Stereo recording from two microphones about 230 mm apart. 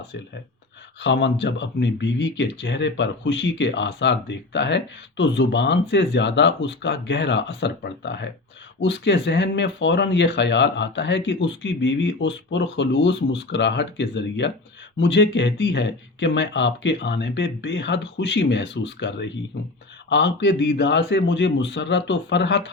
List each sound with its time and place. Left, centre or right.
0.9 s speech: left